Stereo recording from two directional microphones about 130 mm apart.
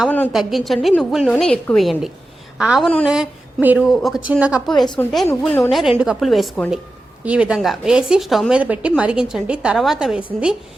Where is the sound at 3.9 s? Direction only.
Centre (ahead or behind).